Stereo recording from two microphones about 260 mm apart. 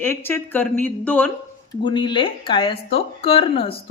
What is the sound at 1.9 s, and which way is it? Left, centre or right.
Speech, centre.